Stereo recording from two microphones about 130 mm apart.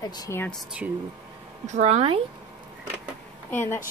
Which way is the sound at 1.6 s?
60° right (ahead or behind).